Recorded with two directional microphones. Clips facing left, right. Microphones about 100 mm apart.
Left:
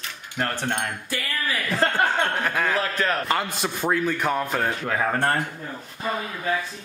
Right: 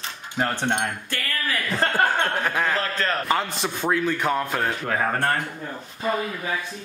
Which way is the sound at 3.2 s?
Centre (ahead or behind).